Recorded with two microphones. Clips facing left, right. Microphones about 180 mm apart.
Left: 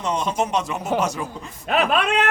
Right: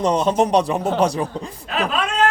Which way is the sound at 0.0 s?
35° right (ahead or behind).